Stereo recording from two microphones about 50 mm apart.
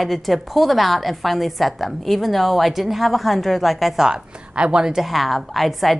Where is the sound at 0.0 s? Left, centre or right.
Centre.